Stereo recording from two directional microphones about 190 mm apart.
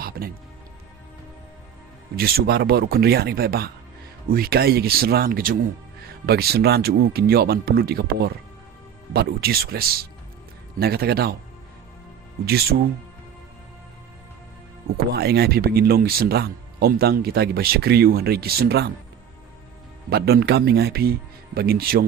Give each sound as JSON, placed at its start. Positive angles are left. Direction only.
{"t": 0.0, "sound": "music", "side_deg": -50}
{"t": 2.1, "sound": "speech", "side_deg": -55}
{"t": 14.9, "sound": "speech", "side_deg": -55}
{"t": 20.1, "sound": "speech", "side_deg": -55}